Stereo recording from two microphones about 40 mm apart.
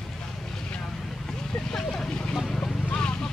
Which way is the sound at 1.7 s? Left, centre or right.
Centre.